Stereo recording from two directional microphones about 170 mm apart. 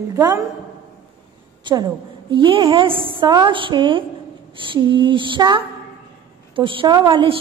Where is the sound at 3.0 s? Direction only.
25° right (ahead or behind).